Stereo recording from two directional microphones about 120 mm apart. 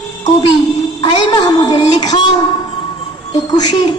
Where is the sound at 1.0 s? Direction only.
35° left (ahead or behind).